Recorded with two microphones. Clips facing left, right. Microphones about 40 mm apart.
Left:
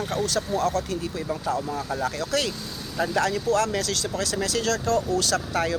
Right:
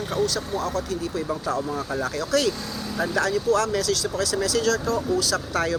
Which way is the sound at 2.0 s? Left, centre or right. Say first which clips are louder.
Right 4 dB; left.